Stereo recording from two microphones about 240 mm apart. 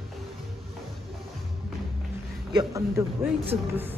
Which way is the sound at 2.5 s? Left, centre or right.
Centre.